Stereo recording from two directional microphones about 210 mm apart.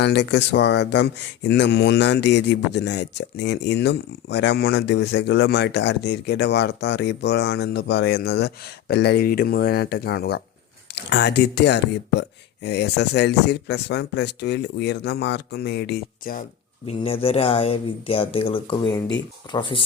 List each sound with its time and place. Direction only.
0.0 s speech: 55° left (ahead or behind)
16.8 s speech: 25° left (ahead or behind)